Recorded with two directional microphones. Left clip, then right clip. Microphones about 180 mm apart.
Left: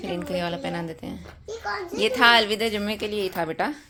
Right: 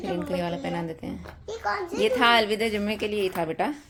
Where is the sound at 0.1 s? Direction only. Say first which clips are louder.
Left 1 dB; 5° left (ahead or behind).